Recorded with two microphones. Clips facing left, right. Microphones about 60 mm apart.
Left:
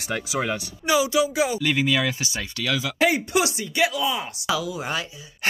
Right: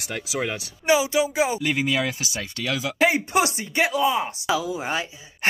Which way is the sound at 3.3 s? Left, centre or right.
Right.